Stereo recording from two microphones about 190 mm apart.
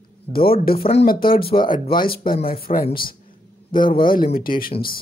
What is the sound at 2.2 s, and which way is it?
Speech, 50° left (ahead or behind).